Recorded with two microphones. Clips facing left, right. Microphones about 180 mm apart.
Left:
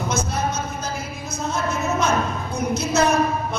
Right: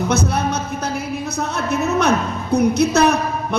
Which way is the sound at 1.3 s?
65° right (ahead or behind).